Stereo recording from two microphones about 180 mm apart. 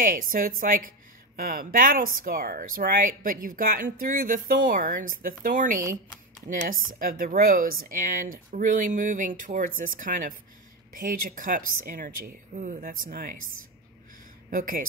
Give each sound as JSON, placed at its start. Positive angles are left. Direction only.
{"t": 0.0, "sound": "a woman's voice", "side_deg": -50}
{"t": 14.5, "sound": "speech", "side_deg": -50}